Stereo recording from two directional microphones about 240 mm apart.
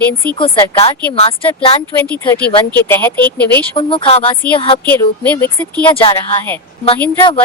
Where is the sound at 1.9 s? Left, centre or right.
Centre.